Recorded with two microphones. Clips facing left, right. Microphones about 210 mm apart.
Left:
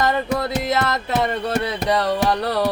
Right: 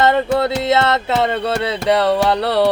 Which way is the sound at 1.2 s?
90° right.